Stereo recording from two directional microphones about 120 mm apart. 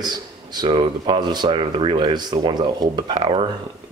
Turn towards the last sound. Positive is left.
turn(degrees=-45)  # may be behind; listen again after turning